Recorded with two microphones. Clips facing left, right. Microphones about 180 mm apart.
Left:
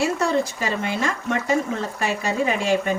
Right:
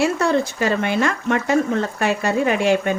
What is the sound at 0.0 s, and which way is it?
Speech, 65° right (ahead or behind).